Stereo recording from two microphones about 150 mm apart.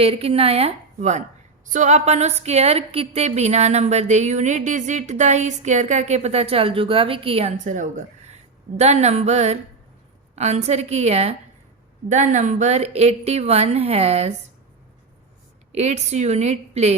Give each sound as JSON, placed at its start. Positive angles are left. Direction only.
{"t": 0.0, "sound": "a woman's voice", "side_deg": -40}
{"t": 15.7, "sound": "a woman's voice", "side_deg": -45}